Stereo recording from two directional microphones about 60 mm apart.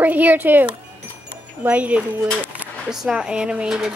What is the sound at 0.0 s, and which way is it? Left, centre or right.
Speech, right.